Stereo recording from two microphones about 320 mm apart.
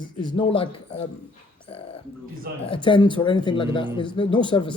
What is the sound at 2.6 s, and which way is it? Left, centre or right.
Speech, centre.